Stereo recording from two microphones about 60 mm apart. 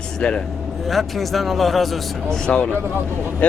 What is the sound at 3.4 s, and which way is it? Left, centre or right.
Speech, left.